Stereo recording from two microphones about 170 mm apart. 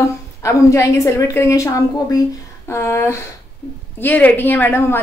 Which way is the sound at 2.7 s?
15° left (ahead or behind).